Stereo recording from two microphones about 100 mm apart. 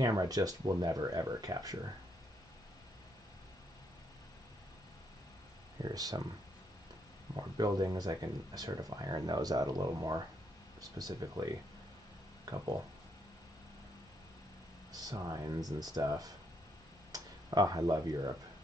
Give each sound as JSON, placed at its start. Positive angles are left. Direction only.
{"t": 0.0, "sound": "speech", "side_deg": -40}
{"t": 5.8, "sound": "speech", "side_deg": -40}
{"t": 7.5, "sound": "speech", "side_deg": -40}
{"t": 12.5, "sound": "speech", "side_deg": -40}
{"t": 14.9, "sound": "speech", "side_deg": -40}